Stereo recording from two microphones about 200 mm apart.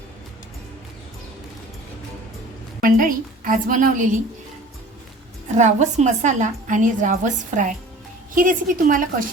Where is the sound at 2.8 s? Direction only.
45° right (ahead or behind).